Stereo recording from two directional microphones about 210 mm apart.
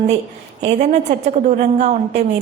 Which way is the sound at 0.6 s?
35° right (ahead or behind).